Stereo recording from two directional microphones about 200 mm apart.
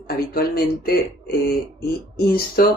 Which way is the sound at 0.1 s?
50° left (ahead or behind).